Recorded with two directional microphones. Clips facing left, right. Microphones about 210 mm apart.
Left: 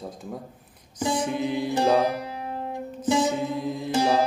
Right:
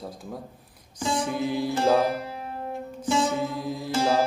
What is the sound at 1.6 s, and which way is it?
Music, 20° left (ahead or behind).